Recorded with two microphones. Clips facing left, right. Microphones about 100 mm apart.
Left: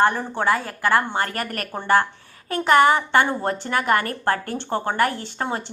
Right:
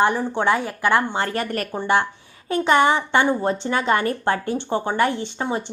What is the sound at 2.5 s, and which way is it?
A woman's voice, 20° right (ahead or behind).